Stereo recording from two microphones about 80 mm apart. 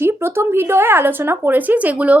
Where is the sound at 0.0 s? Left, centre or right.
Right.